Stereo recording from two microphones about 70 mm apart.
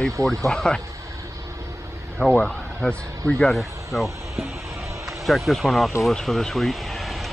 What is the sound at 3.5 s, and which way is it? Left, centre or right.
Speech, centre.